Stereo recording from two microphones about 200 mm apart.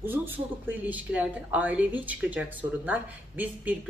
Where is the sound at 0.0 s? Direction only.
10° right (ahead or behind).